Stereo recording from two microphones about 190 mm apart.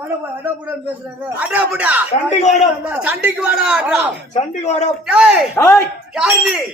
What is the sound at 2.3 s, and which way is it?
Speech, 40° left (ahead or behind).